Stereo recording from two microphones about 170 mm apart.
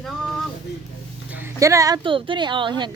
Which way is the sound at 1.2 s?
10° right (ahead or behind).